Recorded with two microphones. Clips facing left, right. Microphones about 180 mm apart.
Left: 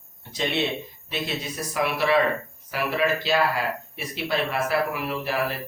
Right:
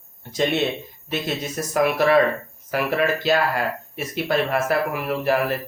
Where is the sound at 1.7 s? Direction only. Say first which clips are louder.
Right 5 dB; 45° right (ahead or behind).